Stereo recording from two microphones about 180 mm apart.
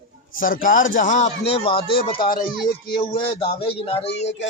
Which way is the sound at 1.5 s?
30° left (ahead or behind).